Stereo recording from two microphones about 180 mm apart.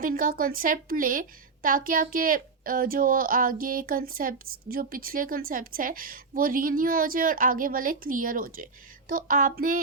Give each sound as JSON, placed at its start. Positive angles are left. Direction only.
{"t": 0.0, "sound": "a woman's voice", "side_deg": -50}